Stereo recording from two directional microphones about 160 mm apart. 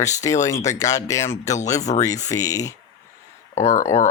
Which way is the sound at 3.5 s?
45° left (ahead or behind).